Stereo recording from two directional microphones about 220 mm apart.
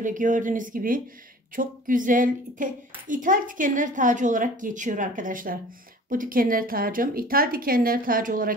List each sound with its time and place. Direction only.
0.0 s a woman's voice: 35° right (ahead or behind)